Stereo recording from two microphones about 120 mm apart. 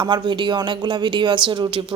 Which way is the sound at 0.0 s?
40° right (ahead or behind).